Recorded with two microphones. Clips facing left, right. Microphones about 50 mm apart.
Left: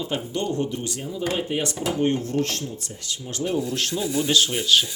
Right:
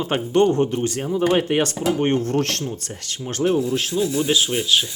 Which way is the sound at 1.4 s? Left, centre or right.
Right.